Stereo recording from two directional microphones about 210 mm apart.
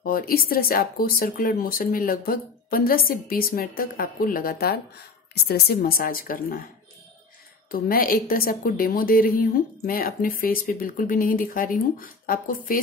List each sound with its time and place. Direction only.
0.0 s a woman's voice: 45° left (ahead or behind)
7.7 s a woman's voice: 45° left (ahead or behind)